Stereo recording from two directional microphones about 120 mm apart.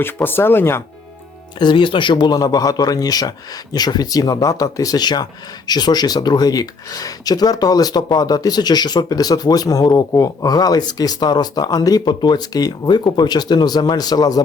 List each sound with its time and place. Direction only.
0.0 s speech: 20° left (ahead or behind)
1.5 s speech: 40° left (ahead or behind)